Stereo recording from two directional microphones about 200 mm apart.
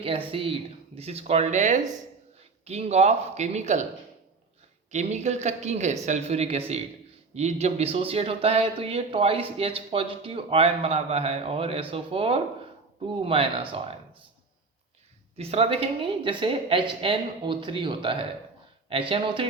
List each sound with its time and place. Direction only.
0.0 s speech: 30° right (ahead or behind)
4.9 s speech: 35° right (ahead or behind)
15.4 s speech: 30° right (ahead or behind)